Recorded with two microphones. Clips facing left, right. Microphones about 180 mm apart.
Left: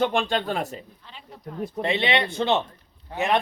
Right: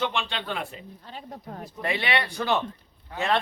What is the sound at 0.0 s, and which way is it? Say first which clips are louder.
Speech: left 6 dB; 45° left (ahead or behind).